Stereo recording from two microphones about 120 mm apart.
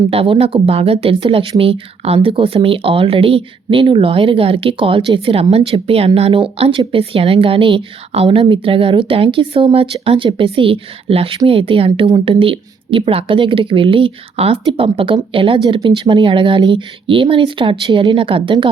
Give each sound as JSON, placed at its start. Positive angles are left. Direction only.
{"t": 0.1, "sound": "speech", "side_deg": -55}